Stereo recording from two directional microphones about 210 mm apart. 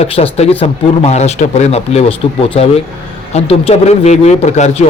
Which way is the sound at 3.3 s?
30° left (ahead or behind).